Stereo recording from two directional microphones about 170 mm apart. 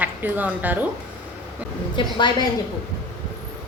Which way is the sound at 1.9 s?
25° left (ahead or behind).